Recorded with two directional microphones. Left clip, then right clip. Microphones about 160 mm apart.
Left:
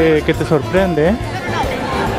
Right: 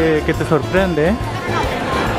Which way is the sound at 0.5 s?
10° right (ahead or behind).